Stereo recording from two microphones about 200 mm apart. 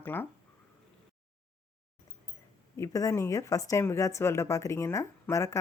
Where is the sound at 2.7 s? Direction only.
15° left (ahead or behind).